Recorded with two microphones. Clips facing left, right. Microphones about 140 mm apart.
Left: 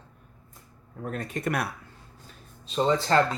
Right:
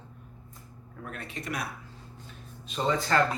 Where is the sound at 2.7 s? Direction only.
30° left (ahead or behind).